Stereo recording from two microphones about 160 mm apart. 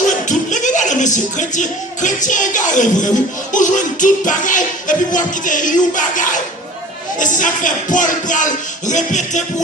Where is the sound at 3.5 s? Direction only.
50° left (ahead or behind).